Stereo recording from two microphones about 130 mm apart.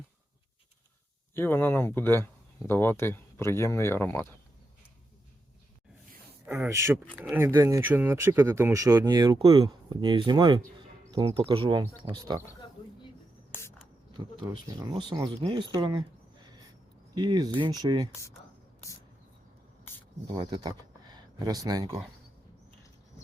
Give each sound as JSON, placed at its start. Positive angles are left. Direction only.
{"t": 1.3, "sound": "speech", "side_deg": 15}
{"t": 6.5, "sound": "speech", "side_deg": -20}
{"t": 11.3, "sound": "speech", "side_deg": -45}
{"t": 13.5, "sound": "spray", "side_deg": 20}
{"t": 15.1, "sound": "speech", "side_deg": -35}
{"t": 17.2, "sound": "speech", "side_deg": -35}
{"t": 20.3, "sound": "speech", "side_deg": -40}